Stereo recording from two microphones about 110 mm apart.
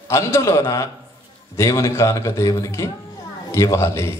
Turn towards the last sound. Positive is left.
turn(degrees=25)  # may be behind; listen again after turning